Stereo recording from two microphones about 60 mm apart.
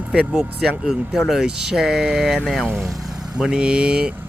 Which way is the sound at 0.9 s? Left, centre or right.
Centre.